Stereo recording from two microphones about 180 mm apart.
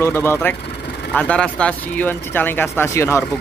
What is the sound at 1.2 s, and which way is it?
Speech, 5° left (ahead or behind).